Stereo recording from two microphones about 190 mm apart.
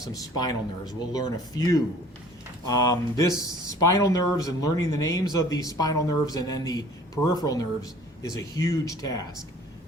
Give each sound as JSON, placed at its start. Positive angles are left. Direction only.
{"t": 0.0, "sound": "speech", "side_deg": 20}